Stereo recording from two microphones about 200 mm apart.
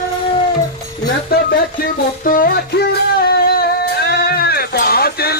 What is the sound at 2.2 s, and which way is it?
Music, 45° left (ahead or behind).